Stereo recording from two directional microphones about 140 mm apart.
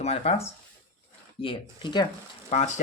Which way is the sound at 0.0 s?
50° left (ahead or behind).